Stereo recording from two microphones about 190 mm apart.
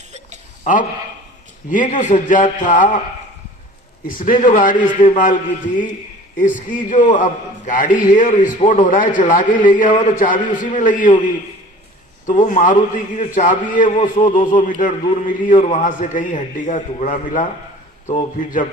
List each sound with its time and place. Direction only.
0.6 s a man's voice: 40° left (ahead or behind)
4.0 s a man's voice: 45° left (ahead or behind)
12.5 s a man's voice: 45° left (ahead or behind)